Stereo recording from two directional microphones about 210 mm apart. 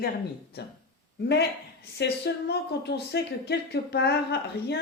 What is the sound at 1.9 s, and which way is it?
A woman's voice, 50° left (ahead or behind).